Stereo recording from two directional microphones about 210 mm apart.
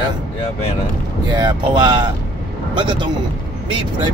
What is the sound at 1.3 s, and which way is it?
Speech, 20° right (ahead or behind).